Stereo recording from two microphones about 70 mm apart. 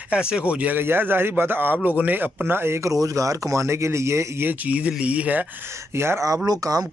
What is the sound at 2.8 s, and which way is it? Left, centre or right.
Speech, right.